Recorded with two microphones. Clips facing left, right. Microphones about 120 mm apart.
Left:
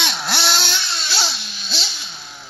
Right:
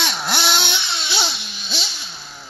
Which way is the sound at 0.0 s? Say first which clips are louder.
Right 1 dB; 10° right (ahead or behind).